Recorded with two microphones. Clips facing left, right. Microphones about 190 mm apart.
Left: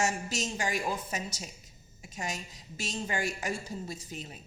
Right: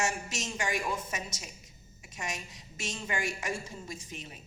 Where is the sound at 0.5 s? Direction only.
35° left (ahead or behind).